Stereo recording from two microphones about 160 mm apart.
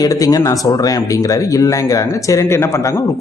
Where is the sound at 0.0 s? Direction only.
25° left (ahead or behind).